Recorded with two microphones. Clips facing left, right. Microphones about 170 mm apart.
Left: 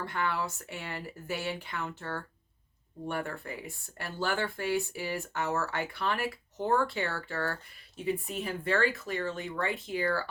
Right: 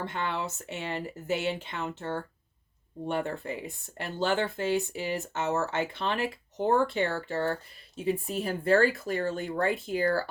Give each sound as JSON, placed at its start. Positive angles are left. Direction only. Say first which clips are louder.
{"t": 0.0, "sound": "speech", "louder": "even", "side_deg": -20}
{"t": 8.0, "sound": "speech", "louder": "right 3 dB", "side_deg": -35}